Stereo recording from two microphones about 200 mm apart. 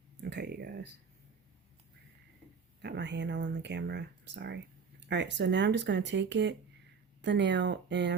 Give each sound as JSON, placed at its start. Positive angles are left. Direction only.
{"t": 0.2, "sound": "speech", "side_deg": -55}
{"t": 2.8, "sound": "speech", "side_deg": -60}